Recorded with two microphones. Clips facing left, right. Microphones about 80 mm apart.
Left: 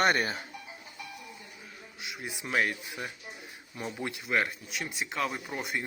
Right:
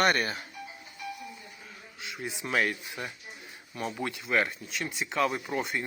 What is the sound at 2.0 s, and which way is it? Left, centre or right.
Speech, centre.